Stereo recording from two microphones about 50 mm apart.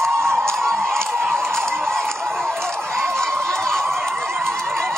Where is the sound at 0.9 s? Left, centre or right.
Centre.